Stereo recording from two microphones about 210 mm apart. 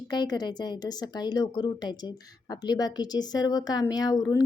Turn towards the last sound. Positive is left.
turn(degrees=20)  # may be behind; listen again after turning